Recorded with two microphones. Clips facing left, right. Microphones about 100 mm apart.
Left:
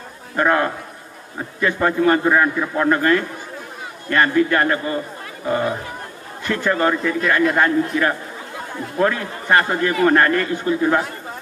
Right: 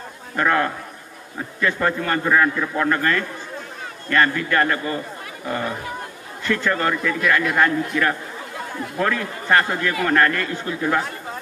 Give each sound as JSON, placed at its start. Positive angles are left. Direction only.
{"t": 0.4, "sound": "a man's voice", "side_deg": 20}
{"t": 6.6, "sound": "a man's voice", "side_deg": 20}